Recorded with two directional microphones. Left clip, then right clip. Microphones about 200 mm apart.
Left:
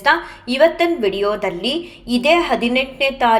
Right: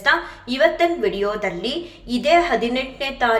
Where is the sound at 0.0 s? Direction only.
20° left (ahead or behind).